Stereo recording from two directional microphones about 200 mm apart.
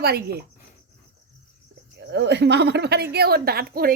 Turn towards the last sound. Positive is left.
turn(degrees=-50)  # may be behind; listen again after turning